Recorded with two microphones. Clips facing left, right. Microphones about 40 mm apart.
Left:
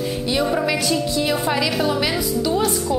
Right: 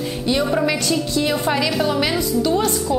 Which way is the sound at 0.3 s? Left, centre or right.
Centre.